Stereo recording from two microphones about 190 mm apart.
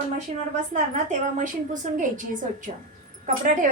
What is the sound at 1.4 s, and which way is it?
A woman's voice, 40° right (ahead or behind).